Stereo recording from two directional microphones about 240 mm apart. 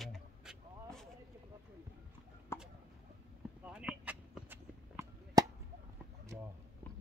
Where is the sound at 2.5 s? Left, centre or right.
Centre.